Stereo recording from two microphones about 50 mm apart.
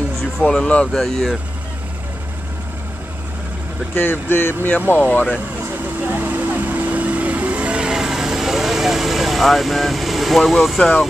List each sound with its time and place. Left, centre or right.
0.4 s speech: left
0.9 s speech: centre
3.9 s speech: left
4.7 s speech: left
6.0 s vehicle: right; by 10.8 s centre
10.8 s speech: centre